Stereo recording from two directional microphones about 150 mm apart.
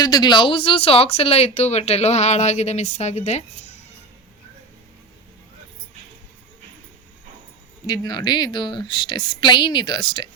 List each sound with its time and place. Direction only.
0.0 s speech: 30° left (ahead or behind); by 3.4 s 45° left (ahead or behind)
7.9 s a woman's voice: 25° left (ahead or behind)